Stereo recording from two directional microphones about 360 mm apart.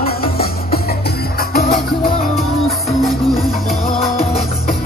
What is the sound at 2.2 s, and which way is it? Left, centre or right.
Music, centre.